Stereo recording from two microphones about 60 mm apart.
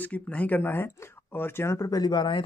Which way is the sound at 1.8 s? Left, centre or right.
Left.